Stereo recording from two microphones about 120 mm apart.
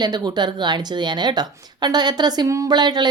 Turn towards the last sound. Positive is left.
turn(degrees=-35)  # may be behind; listen again after turning